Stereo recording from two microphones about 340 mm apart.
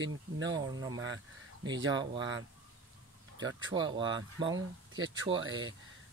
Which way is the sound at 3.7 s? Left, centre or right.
Centre.